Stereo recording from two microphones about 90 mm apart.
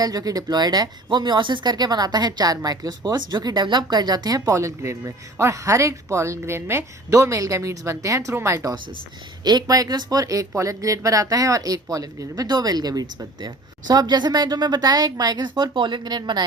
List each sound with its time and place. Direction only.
0.0 s speech: 45° right (ahead or behind)
9.4 s speech: 50° right (ahead or behind)